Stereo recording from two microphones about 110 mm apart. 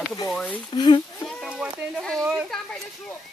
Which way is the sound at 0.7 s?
45° left (ahead or behind).